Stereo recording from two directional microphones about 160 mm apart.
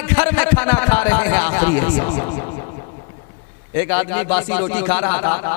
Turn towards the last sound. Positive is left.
turn(degrees=15)  # may be behind; listen again after turning